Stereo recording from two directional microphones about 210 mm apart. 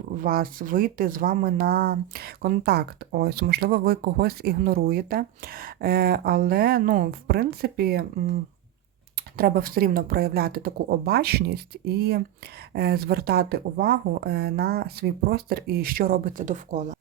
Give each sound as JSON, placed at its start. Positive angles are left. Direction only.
{"t": 0.2, "sound": "speech", "side_deg": -45}
{"t": 9.4, "sound": "speech", "side_deg": -45}